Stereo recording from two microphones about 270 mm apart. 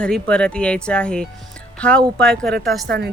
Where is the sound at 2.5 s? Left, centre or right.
Right.